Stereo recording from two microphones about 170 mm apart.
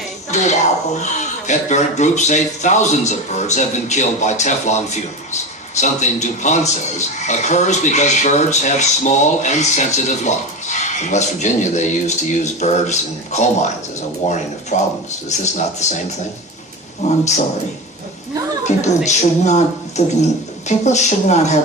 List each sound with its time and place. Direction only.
0.3 s speech: 45° left (ahead or behind)
18.7 s speech: 45° left (ahead or behind)